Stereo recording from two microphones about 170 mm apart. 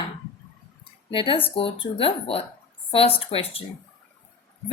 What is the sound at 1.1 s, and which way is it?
Speech, 30° left (ahead or behind).